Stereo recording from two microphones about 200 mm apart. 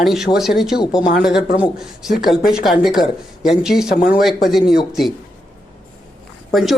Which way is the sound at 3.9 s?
45° left (ahead or behind).